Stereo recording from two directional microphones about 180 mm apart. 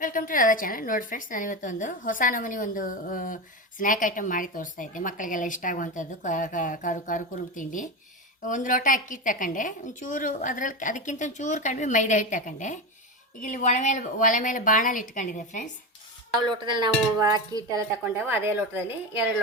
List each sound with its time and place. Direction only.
0.0 s a woman's voice: 50° left (ahead or behind)
16.5 s speech: 25° right (ahead or behind)